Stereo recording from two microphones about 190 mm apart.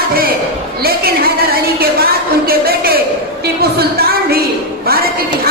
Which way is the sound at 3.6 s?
55° right (ahead or behind).